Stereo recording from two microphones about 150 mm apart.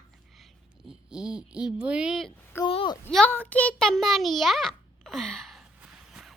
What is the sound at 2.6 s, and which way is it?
Speech, 30° left (ahead or behind).